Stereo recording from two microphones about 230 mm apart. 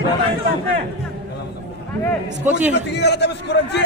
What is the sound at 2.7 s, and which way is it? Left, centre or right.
A man's voice, left.